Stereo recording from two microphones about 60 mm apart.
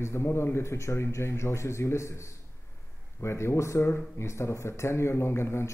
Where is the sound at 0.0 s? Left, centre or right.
Left.